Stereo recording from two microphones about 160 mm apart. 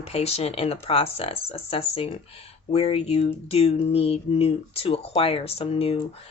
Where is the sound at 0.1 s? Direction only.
40° left (ahead or behind).